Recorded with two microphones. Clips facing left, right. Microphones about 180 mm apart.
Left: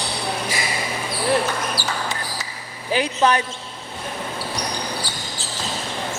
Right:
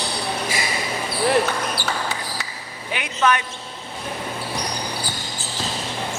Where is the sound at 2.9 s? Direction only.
35° left (ahead or behind).